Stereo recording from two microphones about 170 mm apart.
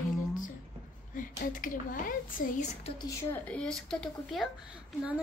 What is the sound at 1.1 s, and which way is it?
A child's voice, 50° left (ahead or behind).